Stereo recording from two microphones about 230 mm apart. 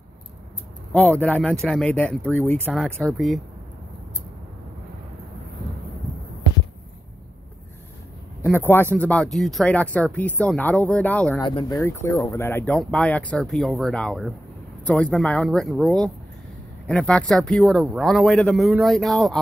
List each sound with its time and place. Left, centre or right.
0.9 s speech: centre
8.4 s speech: centre
11.4 s speech: centre